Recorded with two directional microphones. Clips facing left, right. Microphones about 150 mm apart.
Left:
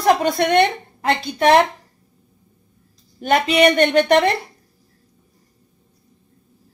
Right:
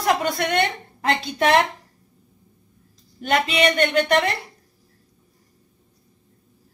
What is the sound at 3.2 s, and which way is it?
Speech, 45° left (ahead or behind).